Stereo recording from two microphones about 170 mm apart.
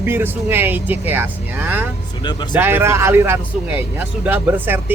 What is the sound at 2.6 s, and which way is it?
Speech, 10° right (ahead or behind).